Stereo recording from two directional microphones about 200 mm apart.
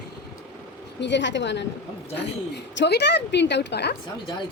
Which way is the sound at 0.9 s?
60° left (ahead or behind).